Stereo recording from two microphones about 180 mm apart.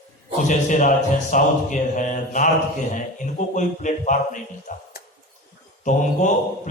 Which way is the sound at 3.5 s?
45° left (ahead or behind).